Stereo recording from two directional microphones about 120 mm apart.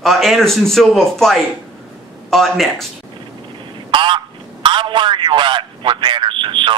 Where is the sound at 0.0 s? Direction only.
Centre (ahead or behind).